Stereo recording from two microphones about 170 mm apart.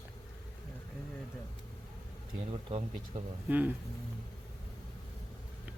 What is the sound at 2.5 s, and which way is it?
Speech, 35° right (ahead or behind).